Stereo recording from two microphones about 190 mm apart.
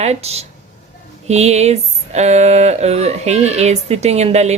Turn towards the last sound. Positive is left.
turn(degrees=-35)  # may be behind; listen again after turning